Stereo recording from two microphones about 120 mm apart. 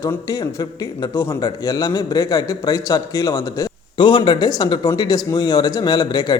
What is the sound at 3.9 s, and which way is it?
Speech, 40° left (ahead or behind).